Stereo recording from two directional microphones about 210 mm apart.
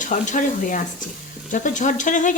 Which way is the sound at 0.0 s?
35° left (ahead or behind).